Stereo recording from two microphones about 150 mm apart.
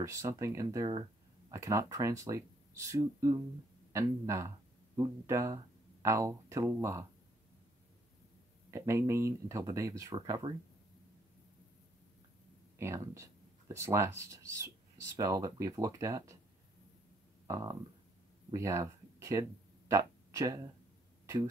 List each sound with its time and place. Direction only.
0.0 s speech: 20° right (ahead or behind)
8.6 s speech: 20° right (ahead or behind)
12.7 s speech: 20° right (ahead or behind)
17.5 s speech: 25° right (ahead or behind)